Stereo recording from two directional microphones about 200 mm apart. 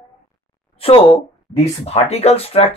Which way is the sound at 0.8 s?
30° left (ahead or behind).